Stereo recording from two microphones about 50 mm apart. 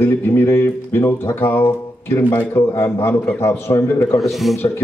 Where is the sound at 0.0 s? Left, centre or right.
Left.